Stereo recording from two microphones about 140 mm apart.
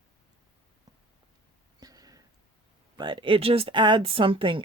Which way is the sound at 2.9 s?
35° right (ahead or behind).